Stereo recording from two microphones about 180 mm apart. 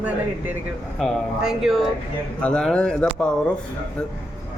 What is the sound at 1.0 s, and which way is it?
A man's voice, centre (ahead or behind).